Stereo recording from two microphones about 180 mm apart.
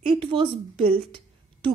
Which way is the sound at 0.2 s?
25° right (ahead or behind).